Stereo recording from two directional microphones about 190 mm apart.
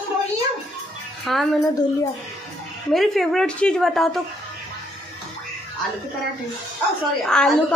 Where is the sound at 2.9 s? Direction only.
Centre (ahead or behind).